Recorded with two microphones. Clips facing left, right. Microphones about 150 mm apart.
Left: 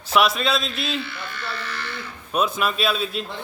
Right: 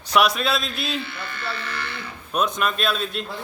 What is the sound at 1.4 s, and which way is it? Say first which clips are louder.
Speech: right 2 dB; 60° right (ahead or behind).